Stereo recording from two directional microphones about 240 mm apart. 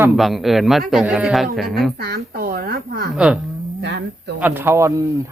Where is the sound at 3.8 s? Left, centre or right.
Right.